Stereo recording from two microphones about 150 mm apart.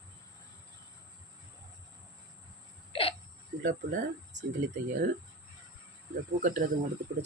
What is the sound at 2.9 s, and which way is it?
Hiccup, 40° left (ahead or behind).